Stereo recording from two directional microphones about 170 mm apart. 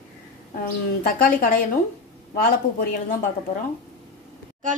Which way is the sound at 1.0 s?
55° left (ahead or behind).